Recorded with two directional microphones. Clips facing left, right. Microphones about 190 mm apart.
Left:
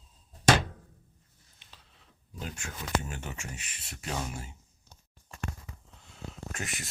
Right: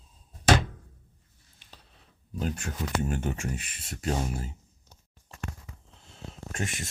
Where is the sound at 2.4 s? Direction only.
45° right (ahead or behind).